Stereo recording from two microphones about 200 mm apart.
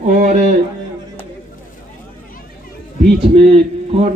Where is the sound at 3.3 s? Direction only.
30° right (ahead or behind).